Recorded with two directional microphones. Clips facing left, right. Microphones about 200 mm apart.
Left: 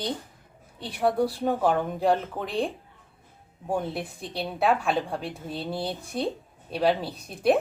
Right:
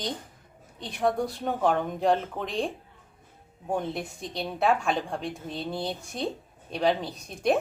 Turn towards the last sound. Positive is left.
turn(degrees=5)  # may be behind; listen again after turning